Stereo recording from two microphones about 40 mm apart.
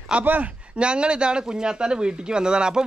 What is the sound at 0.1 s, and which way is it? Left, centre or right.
Speech, right.